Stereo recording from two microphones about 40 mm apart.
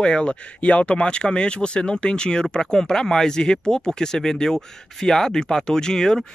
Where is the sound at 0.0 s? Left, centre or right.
Left.